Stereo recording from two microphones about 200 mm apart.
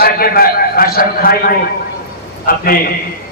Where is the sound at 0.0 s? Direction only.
50° left (ahead or behind).